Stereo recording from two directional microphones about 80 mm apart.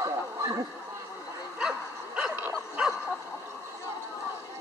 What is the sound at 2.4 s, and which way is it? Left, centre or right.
Bow-wow, right.